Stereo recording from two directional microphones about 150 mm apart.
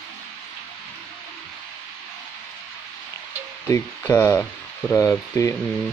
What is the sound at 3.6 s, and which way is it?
Speech, 15° left (ahead or behind).